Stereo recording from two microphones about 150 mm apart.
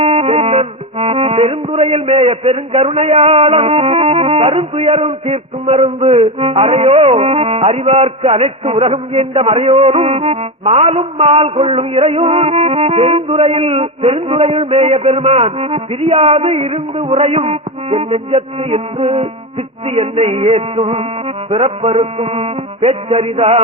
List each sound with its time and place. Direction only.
0.0 s music: 40° right (ahead or behind)